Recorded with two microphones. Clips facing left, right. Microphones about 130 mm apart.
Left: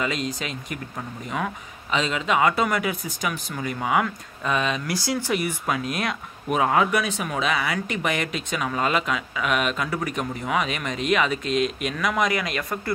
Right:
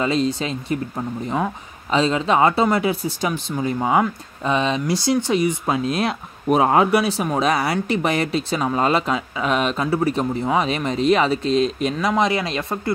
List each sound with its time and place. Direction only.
0.0 s speech: 30° right (ahead or behind)